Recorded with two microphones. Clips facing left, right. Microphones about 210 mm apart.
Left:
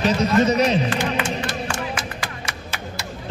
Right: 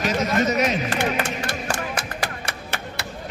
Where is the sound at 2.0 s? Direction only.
60° right (ahead or behind).